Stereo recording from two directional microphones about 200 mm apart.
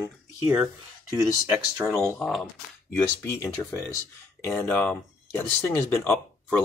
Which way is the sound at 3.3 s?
15° left (ahead or behind).